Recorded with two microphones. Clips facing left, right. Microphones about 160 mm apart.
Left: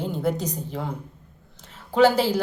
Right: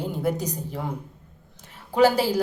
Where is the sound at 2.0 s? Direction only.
10° right (ahead or behind).